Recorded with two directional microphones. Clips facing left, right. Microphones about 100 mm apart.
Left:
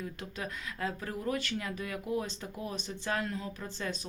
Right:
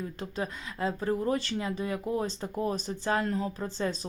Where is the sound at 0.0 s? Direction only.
30° right (ahead or behind).